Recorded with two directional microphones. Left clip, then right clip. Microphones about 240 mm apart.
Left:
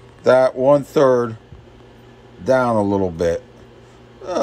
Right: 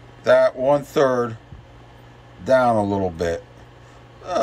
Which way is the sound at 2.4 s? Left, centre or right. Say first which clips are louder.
Even; centre.